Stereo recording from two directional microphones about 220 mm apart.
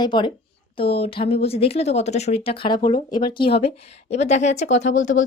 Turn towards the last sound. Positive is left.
turn(degrees=35)  # may be behind; listen again after turning